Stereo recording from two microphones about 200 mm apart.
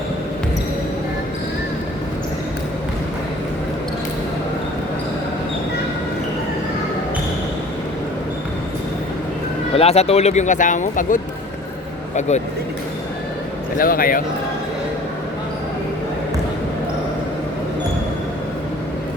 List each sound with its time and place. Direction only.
9.7 s speech: 30° left (ahead or behind)
13.7 s speech: 45° left (ahead or behind)